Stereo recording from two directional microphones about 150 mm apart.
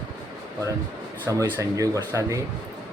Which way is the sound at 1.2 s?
20° right (ahead or behind).